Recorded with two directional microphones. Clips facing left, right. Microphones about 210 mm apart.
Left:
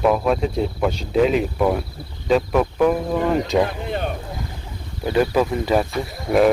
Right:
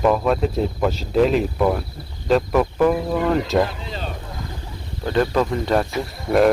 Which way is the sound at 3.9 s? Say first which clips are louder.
Left 6 dB; 60° left (ahead or behind).